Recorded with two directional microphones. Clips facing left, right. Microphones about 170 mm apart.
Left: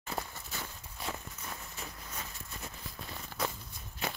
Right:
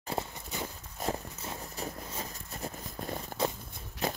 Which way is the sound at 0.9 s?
40° right (ahead or behind).